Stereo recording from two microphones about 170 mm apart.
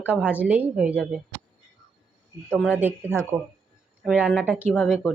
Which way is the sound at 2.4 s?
5° right (ahead or behind).